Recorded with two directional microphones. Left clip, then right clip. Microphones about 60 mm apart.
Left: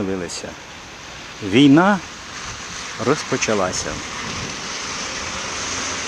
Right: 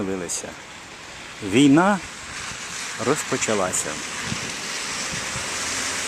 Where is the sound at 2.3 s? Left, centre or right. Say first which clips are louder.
Left 1 dB; right.